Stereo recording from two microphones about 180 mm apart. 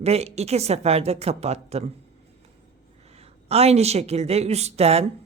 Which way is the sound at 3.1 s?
35° right (ahead or behind).